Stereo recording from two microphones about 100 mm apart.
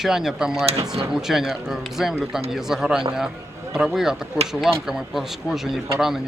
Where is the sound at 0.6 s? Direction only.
80° right.